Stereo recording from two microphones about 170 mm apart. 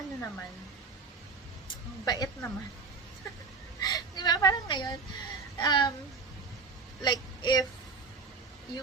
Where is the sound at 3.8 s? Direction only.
25° left (ahead or behind).